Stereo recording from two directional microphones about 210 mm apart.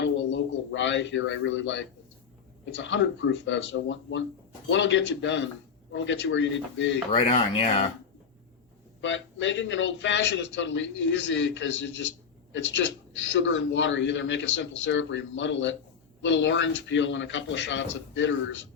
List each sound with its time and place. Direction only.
0.0 s a sound: 60° left (ahead or behind)
2.7 s a man's voice: 60° left (ahead or behind)
7.2 s speech: 30° left (ahead or behind)
9.0 s a man's voice: 60° left (ahead or behind)